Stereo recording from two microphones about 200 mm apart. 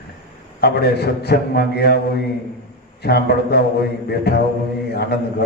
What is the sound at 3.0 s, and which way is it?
A man's voice, 55° left (ahead or behind).